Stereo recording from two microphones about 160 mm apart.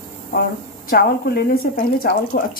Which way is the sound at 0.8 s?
75° left (ahead or behind).